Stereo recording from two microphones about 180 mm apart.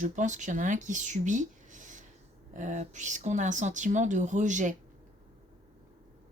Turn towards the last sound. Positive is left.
turn(degrees=-45)  # may be behind; listen again after turning